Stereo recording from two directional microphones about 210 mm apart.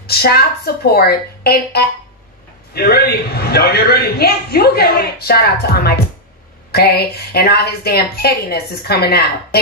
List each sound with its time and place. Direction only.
0.0 s a man's voice: 50° left (ahead or behind)